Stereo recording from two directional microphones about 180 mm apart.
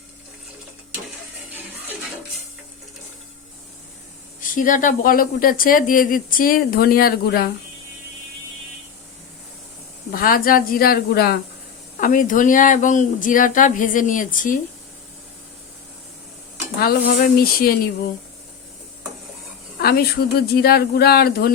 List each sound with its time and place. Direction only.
4.4 s speech: 50° left (ahead or behind)
10.1 s speech: 55° left (ahead or behind)
11.9 s speech: 50° left (ahead or behind)
17.4 s speech: 55° left (ahead or behind)
19.8 s speech: 60° left (ahead or behind)